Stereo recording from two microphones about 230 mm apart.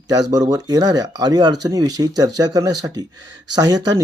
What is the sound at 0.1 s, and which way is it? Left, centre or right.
Speech, centre.